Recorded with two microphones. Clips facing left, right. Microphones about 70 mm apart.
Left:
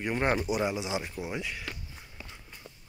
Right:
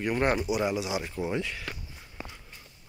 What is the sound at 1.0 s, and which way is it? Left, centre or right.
Speech, centre.